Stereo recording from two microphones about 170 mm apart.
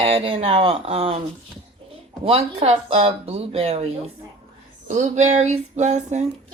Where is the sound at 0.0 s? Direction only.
35° right (ahead or behind).